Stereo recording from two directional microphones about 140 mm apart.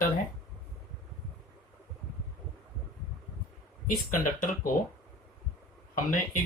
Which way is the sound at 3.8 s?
75° left (ahead or behind).